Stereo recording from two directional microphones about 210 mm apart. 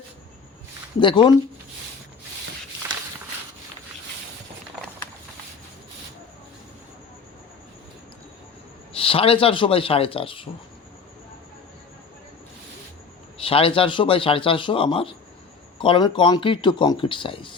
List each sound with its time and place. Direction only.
0.9 s a man's voice: 25° left (ahead or behind)
8.9 s a man's voice: 25° left (ahead or behind)
13.4 s a man's voice: 25° left (ahead or behind)